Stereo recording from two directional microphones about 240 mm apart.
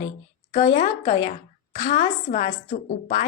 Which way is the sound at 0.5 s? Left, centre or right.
Left.